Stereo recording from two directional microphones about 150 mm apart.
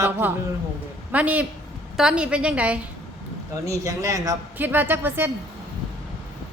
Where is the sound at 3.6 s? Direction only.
20° right (ahead or behind).